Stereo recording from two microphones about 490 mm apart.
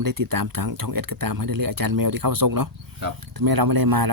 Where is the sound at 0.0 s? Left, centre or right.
Right.